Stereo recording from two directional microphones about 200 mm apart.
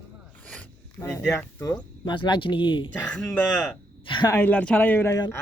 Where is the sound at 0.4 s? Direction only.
10° left (ahead or behind).